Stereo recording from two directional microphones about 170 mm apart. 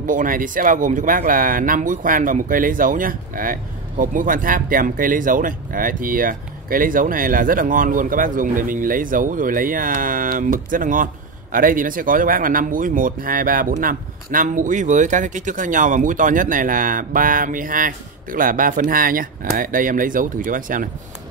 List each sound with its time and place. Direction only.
0.0 s speech: 50° right (ahead or behind)